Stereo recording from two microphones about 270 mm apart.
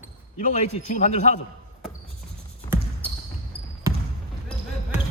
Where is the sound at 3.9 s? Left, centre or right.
Centre.